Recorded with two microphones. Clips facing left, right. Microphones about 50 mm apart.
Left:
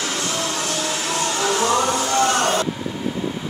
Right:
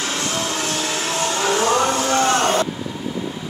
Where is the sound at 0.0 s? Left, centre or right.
Right.